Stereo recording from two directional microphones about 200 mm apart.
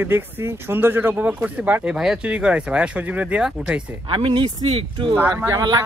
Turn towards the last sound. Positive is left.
turn(degrees=-20)  # may be behind; listen again after turning